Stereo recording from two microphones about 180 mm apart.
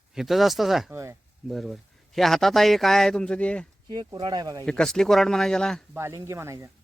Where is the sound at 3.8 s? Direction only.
25° right (ahead or behind).